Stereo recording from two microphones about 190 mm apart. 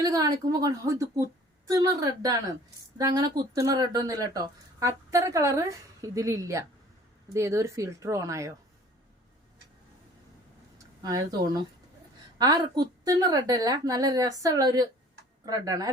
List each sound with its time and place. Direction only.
0.0 s a woman's voice: 20° right (ahead or behind)
11.0 s a woman's voice: 20° right (ahead or behind)